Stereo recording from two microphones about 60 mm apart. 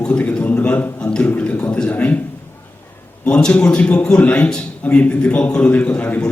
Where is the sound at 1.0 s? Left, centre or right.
Centre.